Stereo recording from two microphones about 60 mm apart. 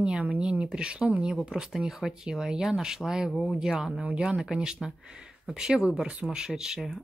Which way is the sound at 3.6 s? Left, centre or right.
Centre.